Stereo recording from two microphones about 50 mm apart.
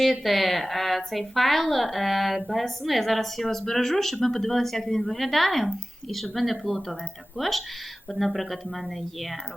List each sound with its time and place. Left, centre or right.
0.0 s speech: centre